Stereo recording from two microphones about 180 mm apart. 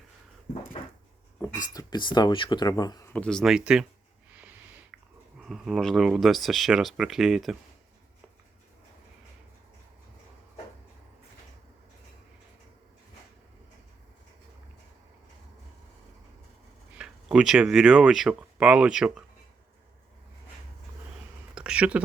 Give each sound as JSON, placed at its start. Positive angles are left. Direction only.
{"t": 1.7, "sound": "speech", "side_deg": 20}
{"t": 3.1, "sound": "speech", "side_deg": 5}
{"t": 4.9, "sound": "a sound", "side_deg": -5}
{"t": 5.5, "sound": "speech", "side_deg": 0}
{"t": 17.0, "sound": "speech", "side_deg": -5}
{"t": 21.5, "sound": "a sound", "side_deg": -5}